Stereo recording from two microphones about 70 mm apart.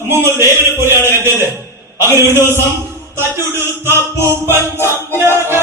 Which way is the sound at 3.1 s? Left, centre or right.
Right.